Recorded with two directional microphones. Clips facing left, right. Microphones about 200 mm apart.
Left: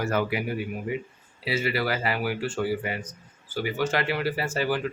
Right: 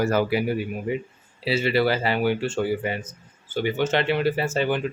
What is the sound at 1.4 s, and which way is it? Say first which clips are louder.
Speech: right 5 dB; 25° right (ahead or behind).